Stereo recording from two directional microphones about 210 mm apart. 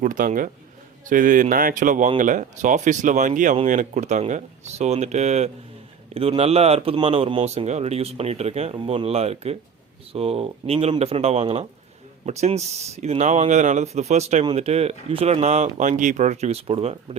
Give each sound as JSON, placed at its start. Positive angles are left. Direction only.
{"t": 0.0, "sound": "speech", "side_deg": -40}